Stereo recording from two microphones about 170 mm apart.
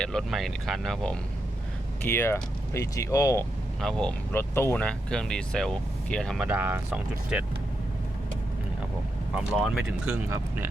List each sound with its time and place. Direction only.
0.0 s speech: centre (ahead or behind)
2.0 s speech: 15° left (ahead or behind)
3.8 s speech: 5° left (ahead or behind)
6.4 s speech: 10° right (ahead or behind)
9.3 s speech: 5° right (ahead or behind)